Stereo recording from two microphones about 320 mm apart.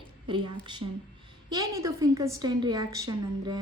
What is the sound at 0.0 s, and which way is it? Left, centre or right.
A woman's voice, centre.